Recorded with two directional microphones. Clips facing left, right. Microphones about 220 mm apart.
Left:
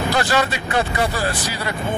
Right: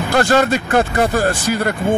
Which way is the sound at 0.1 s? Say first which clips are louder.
Right 9 dB; 45° right (ahead or behind).